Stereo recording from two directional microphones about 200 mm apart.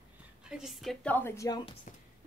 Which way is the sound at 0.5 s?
Centre (ahead or behind).